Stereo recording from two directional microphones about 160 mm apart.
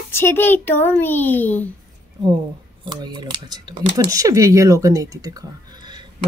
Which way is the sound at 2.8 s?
25° right (ahead or behind).